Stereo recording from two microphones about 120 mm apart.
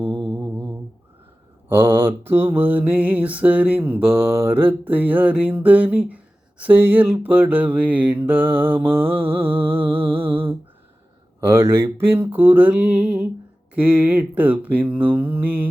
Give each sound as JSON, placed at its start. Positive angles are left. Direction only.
{"t": 1.7, "sound": "mantra", "side_deg": -20}
{"t": 11.4, "sound": "mantra", "side_deg": -25}